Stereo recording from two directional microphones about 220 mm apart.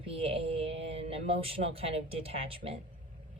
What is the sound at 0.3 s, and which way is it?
Speech, 25° right (ahead or behind).